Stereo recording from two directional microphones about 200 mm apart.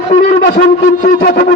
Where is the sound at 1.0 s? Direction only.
45° left (ahead or behind).